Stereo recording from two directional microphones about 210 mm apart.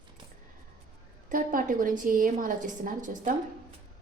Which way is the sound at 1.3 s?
40° right (ahead or behind).